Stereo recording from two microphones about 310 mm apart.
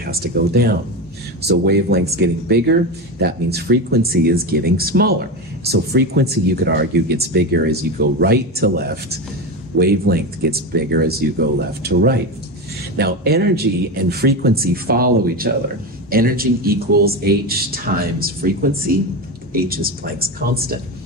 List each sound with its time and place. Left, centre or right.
0.0 s speech: right